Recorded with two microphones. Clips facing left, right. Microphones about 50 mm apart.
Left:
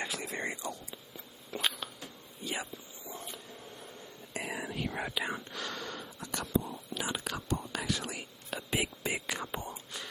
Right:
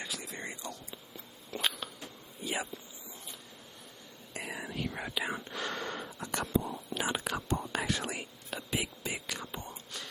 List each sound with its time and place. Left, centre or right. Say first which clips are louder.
0.0 s a sound: left 4 dB; left
0.6 s a sound: left 3 dB; centre
2.4 s a sound: right 2 dB; centre
3.1 s printer: left 7 dB; left
4.4 s whispering: left 1 dB; centre
4.9 s whispering: left 2 dB; centre
5.1 s whispering: right 3 dB; centre
5.5 s gasp: right 3 dB; right
6.6 s whispering: right 3 dB; right
8.7 s whispering: left 3 dB; left
9.7 s wail: left 1 dB; centre